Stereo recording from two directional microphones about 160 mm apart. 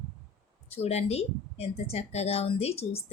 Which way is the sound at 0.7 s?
40° left (ahead or behind).